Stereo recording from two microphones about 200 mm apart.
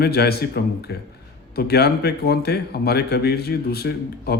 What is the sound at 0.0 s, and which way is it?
A man's voice, 50° left (ahead or behind).